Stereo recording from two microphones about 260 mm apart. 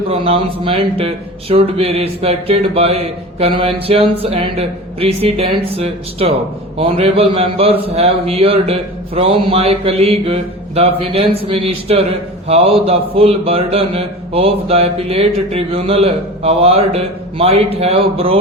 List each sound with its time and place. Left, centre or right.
0.1 s speech: right